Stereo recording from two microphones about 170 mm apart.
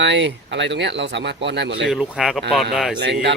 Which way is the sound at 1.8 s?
5° right (ahead or behind).